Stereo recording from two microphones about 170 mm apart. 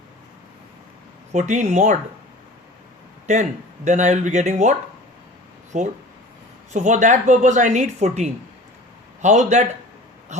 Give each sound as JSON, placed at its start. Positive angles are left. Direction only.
{"t": 1.3, "sound": "a woman's voice", "side_deg": -45}
{"t": 3.8, "sound": "a woman's voice", "side_deg": -45}
{"t": 5.7, "sound": "a woman's voice", "side_deg": -45}